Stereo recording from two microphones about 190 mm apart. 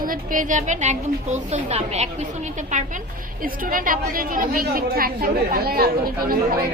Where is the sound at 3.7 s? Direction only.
45° right (ahead or behind).